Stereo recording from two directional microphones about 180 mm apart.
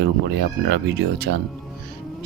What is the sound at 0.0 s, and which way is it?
Speech, 70° right (ahead or behind).